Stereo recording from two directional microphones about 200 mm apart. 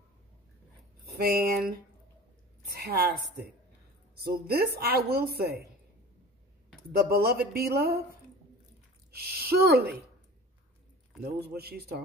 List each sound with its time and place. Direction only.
1.2 s a woman's voice: 55° right (ahead or behind)
2.7 s a woman's voice: 50° right (ahead or behind)
6.9 s a woman's voice: 50° right (ahead or behind)
9.1 s a woman's voice: 50° right (ahead or behind)
11.4 s a woman's voice: 50° right (ahead or behind)